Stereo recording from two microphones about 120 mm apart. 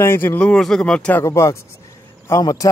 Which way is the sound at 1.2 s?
25° left (ahead or behind).